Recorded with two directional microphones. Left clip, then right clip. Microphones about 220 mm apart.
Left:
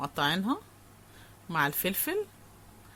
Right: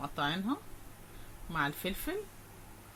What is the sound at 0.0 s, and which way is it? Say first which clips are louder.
Speech: left 5 dB; 45° left (ahead or behind).